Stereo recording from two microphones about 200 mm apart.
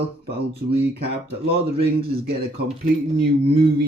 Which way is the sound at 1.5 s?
50° right (ahead or behind).